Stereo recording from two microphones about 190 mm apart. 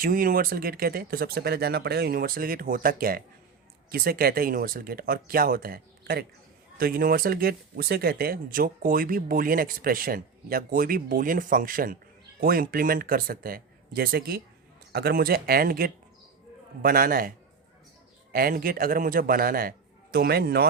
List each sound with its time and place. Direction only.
0.0 s speech: 50° right (ahead or behind)